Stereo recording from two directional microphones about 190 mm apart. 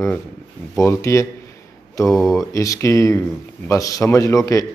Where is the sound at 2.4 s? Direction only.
15° left (ahead or behind).